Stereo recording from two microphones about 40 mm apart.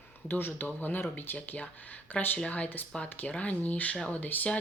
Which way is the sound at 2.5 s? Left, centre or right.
Left.